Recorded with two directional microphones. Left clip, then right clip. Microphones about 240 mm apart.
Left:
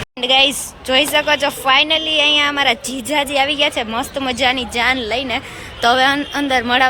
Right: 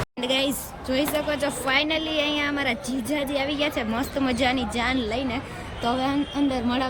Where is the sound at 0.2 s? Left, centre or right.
Centre.